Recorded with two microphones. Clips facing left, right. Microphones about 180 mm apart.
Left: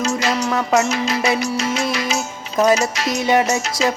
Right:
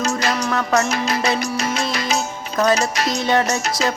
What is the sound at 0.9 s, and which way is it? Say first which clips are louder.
Music: left 1 dB; 55° right (ahead or behind).